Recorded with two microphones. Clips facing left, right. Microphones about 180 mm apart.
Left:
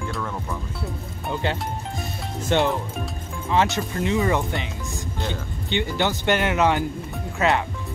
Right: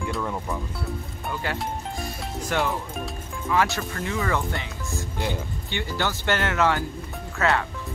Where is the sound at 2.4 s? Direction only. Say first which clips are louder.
Left 5 dB; 25° left (ahead or behind).